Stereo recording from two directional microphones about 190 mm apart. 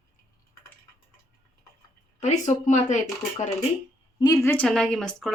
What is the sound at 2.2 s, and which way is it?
Speech, 40° left (ahead or behind).